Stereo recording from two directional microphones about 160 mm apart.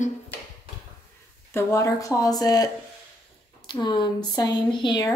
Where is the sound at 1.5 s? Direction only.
15° left (ahead or behind).